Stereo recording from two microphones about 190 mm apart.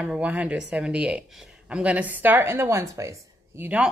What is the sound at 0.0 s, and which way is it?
A woman's voice, 5° right (ahead or behind).